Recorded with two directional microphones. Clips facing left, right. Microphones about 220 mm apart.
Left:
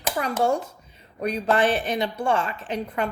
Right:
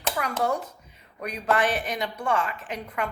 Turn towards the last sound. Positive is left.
turn(degrees=30)  # may be behind; listen again after turning